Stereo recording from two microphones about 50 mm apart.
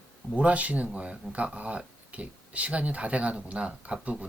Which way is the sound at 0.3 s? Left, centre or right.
Right.